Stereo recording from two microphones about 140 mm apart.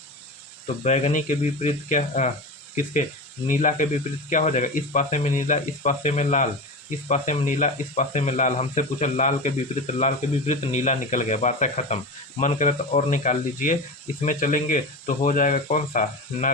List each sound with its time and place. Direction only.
0.9 s speech: 55° left (ahead or behind)
3.4 s speech: 65° left (ahead or behind)